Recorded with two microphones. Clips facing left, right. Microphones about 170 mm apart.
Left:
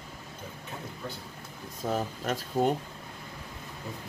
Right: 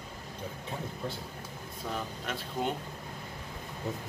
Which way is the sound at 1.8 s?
40° left (ahead or behind).